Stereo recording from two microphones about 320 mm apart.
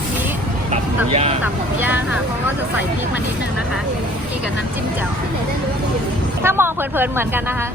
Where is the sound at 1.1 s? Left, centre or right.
Centre.